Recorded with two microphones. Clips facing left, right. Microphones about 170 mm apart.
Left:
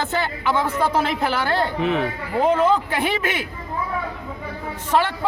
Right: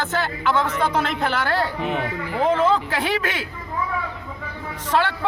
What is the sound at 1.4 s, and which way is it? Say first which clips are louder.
Speech: left 1 dB; 20° left (ahead or behind).